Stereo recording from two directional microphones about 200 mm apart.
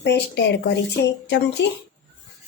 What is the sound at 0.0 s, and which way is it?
Speech, 55° left (ahead or behind).